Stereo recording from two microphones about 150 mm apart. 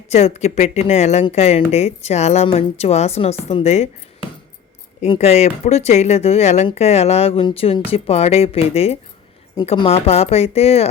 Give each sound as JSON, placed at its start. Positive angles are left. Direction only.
{"t": 0.1, "sound": "a woman's voice", "side_deg": 45}